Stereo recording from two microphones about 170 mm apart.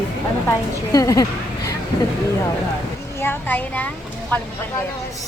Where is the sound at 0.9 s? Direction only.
20° left (ahead or behind).